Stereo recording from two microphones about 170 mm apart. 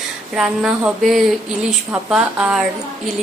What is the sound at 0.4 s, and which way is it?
A woman's voice, 5° right (ahead or behind).